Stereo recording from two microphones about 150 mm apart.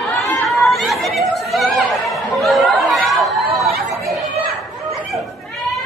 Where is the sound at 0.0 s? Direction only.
Centre (ahead or behind).